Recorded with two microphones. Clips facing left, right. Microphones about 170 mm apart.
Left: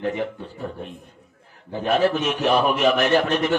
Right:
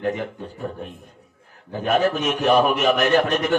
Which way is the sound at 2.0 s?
45° right (ahead or behind).